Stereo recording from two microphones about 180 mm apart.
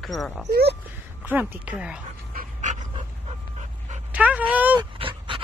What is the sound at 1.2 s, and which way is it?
Speech, 10° right (ahead or behind).